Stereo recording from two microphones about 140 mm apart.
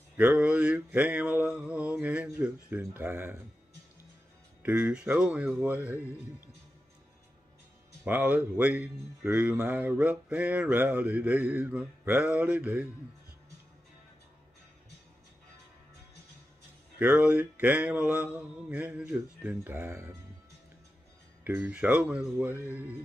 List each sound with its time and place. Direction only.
0.2 s speech: 10° right (ahead or behind)
4.6 s speech: 10° right (ahead or behind)
8.0 s speech: 10° right (ahead or behind)
17.0 s speech: 10° right (ahead or behind)
21.5 s speech: 15° right (ahead or behind)